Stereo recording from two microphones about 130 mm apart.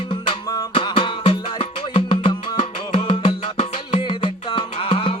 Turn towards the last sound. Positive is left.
turn(degrees=45)  # may be behind; listen again after turning